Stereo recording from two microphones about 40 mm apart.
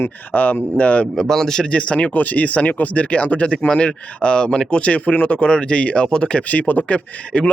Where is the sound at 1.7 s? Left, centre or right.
Left.